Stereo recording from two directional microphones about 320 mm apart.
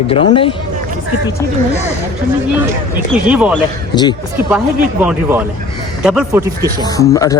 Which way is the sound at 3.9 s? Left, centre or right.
Centre.